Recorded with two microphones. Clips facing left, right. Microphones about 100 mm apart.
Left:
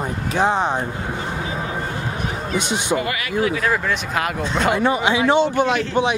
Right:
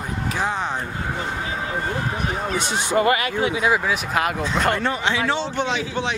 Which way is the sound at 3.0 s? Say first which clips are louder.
Right 2 dB; 35° right (ahead or behind).